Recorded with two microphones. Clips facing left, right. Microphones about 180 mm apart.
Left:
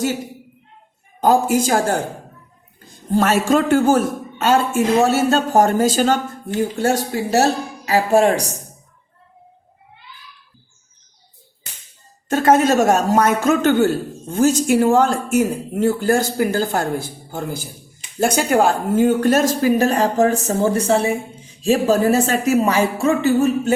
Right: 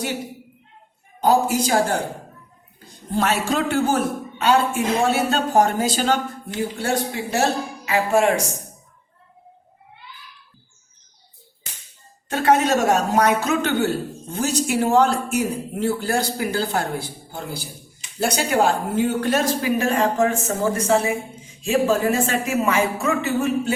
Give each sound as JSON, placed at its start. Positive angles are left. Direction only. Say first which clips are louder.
{"t": 1.2, "sound": "a man's voice", "louder": "left 3 dB", "side_deg": 50}
{"t": 3.1, "sound": "a man's voice", "louder": "left 6 dB", "side_deg": 45}
{"t": 12.3, "sound": "a man's voice", "louder": "left 4 dB", "side_deg": 45}